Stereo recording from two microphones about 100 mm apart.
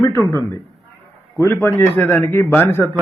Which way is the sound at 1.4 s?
25° left (ahead or behind).